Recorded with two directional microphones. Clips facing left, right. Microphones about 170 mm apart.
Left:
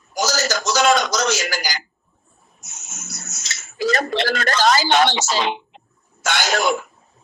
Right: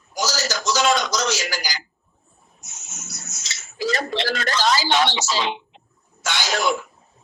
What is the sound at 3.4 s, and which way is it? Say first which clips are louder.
Speech: left 3 dB; 55° left (ahead or behind).